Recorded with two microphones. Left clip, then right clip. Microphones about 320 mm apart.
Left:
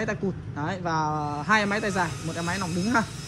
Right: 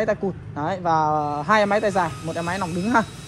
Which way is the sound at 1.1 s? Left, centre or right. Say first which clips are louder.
Right 7 dB; right.